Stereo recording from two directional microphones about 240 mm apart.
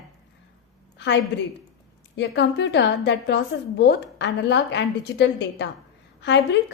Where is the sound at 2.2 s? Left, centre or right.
Left.